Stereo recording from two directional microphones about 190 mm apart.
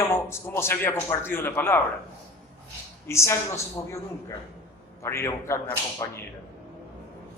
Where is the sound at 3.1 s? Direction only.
15° left (ahead or behind).